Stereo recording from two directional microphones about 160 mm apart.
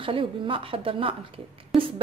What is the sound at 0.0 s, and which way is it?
A woman's voice, 35° right (ahead or behind).